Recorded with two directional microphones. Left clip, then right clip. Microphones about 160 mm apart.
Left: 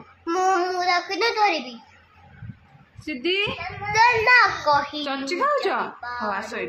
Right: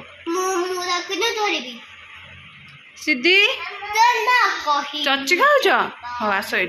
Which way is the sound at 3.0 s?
25° right (ahead or behind).